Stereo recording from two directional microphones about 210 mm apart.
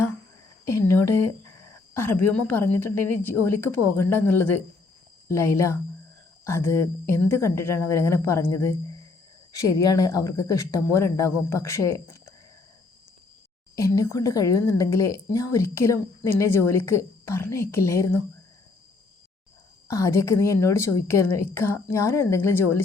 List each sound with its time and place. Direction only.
0.6 s speech: 15° left (ahead or behind)
13.7 s speech: 15° left (ahead or behind)
19.9 s speech: 15° left (ahead or behind)